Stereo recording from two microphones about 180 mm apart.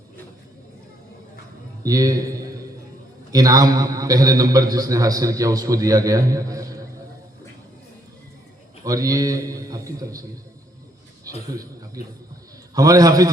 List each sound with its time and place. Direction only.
1.8 s a man's voice: 20° right (ahead or behind)
8.8 s a man's voice: 20° right (ahead or behind)
12.7 s a man's voice: 20° right (ahead or behind)